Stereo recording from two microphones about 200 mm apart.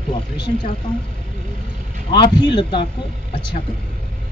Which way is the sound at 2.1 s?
20° left (ahead or behind).